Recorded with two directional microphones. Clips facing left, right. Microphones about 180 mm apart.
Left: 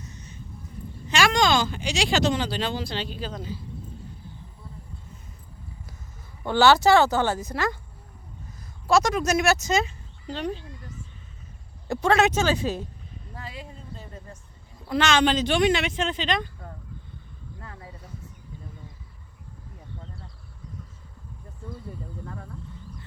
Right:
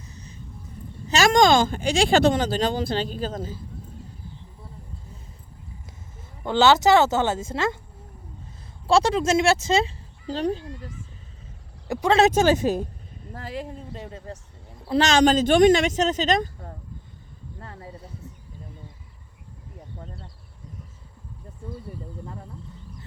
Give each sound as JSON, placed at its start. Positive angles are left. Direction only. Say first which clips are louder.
{"t": 0.0, "sound": "a sound", "louder": "left 1 dB", "side_deg": -35}
{"t": 1.0, "sound": "speech", "louder": "right 5 dB", "side_deg": -40}
{"t": 6.4, "sound": "speech", "louder": "even", "side_deg": -20}
{"t": 8.9, "sound": "speech", "louder": "right 2 dB", "side_deg": -30}
{"t": 11.9, "sound": "speech", "louder": "right 1 dB", "side_deg": -15}
{"t": 12.3, "sound": "speech", "louder": "right 5 dB", "side_deg": -50}
{"t": 13.9, "sound": "speech", "louder": "right 6 dB", "side_deg": -85}
{"t": 14.8, "sound": "speech", "louder": "right 3 dB", "side_deg": -35}
{"t": 20.0, "sound": "a sound", "louder": "right 4 dB", "side_deg": -40}